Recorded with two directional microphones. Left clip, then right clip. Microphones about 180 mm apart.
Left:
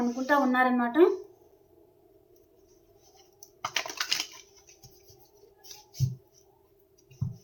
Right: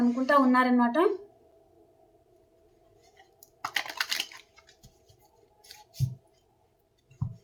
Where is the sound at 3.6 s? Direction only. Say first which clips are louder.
Right 1 dB; 15° right (ahead or behind).